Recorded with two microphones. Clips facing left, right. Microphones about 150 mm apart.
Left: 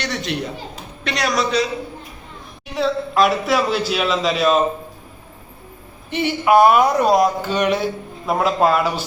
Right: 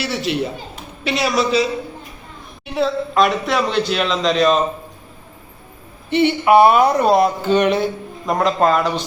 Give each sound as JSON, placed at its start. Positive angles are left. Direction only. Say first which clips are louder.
{"t": 0.0, "sound": "speech", "louder": "right 3 dB", "side_deg": -5}
{"t": 2.7, "sound": "speech", "louder": "right 1 dB", "side_deg": 0}
{"t": 6.1, "sound": "a man's voice", "louder": "right 6 dB", "side_deg": -75}
{"t": 6.4, "sound": "speech", "louder": "even", "side_deg": 0}
{"t": 7.6, "sound": "a sound", "louder": "left 1 dB", "side_deg": -55}
{"t": 8.3, "sound": "speech", "louder": "right 1 dB", "side_deg": 5}